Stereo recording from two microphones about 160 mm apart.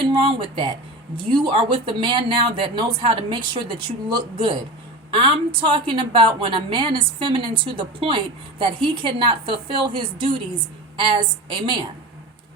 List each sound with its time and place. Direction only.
0.0 s a woman's voice: 35° right (ahead or behind)